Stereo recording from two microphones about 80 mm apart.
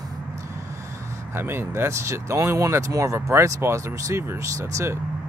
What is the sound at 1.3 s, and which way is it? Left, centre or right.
Speech, right.